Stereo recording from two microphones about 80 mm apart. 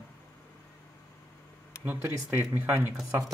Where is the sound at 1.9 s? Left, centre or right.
Right.